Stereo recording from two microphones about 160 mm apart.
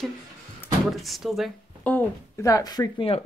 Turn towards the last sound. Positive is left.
turn(degrees=25)  # may be behind; listen again after turning